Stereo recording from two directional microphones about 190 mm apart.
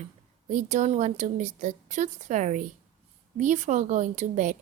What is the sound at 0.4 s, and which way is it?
A woman's voice, 40° right (ahead or behind).